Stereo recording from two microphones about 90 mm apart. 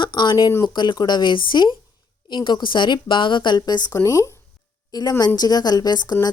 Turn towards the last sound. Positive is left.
turn(degrees=50)  # may be behind; listen again after turning